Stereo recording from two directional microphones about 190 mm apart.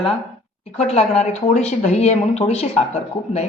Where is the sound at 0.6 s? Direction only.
35° left (ahead or behind).